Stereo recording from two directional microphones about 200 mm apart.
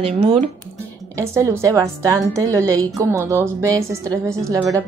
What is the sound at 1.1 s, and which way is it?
A woman's voice, 15° right (ahead or behind).